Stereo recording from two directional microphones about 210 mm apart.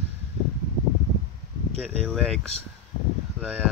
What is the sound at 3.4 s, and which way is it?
Speech, 5° right (ahead or behind).